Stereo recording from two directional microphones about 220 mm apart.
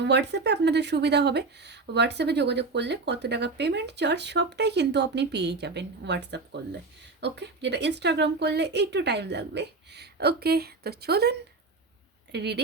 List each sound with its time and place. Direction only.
0.0 s speech: 50° right (ahead or behind)